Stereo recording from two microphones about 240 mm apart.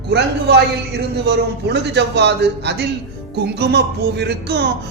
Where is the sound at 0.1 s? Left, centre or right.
Right.